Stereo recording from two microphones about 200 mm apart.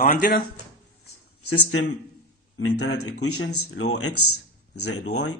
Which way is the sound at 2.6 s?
90° left.